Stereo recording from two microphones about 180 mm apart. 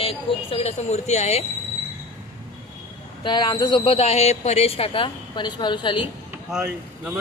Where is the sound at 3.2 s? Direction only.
25° left (ahead or behind).